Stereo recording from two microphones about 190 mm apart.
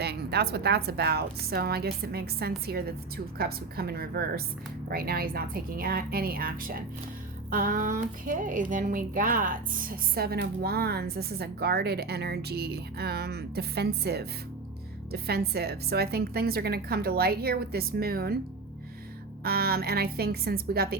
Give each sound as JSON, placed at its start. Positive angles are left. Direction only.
{"t": 0.0, "sound": "a woman's voice", "side_deg": -55}
{"t": 19.5, "sound": "speech", "side_deg": -55}